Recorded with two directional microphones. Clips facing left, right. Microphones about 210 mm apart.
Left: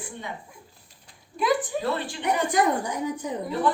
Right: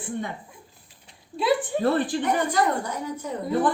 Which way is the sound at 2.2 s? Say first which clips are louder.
Left 6 dB; 15° left (ahead or behind).